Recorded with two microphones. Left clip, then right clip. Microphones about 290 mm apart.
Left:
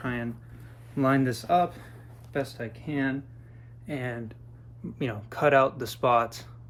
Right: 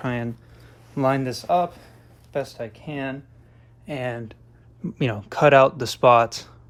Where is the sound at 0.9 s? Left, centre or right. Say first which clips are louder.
Right 3 dB; centre.